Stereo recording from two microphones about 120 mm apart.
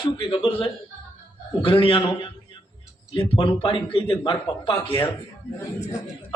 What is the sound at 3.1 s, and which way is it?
A man's voice, 45° left (ahead or behind).